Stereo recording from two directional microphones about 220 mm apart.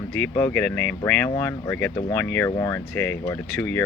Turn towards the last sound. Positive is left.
turn(degrees=5)  # may be behind; listen again after turning